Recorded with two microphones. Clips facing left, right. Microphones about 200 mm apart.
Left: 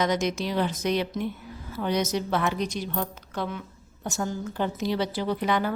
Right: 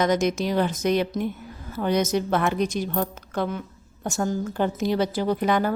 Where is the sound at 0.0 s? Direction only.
50° right (ahead or behind).